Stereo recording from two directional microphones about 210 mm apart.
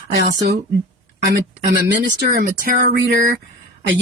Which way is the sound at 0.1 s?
55° right (ahead or behind).